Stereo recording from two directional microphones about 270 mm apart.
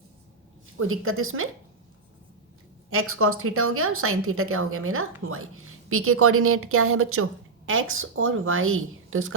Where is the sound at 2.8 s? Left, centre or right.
Right.